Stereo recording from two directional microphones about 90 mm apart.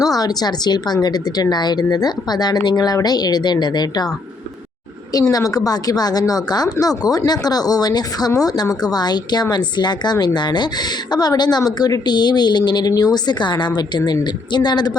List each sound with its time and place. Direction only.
0.0 s a woman's voice: 45° left (ahead or behind)
5.3 s a woman's voice: 40° left (ahead or behind)